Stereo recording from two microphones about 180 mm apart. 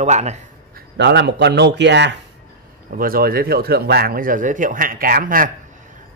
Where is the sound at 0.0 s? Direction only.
40° right (ahead or behind).